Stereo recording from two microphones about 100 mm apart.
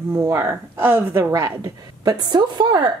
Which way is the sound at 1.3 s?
35° right (ahead or behind).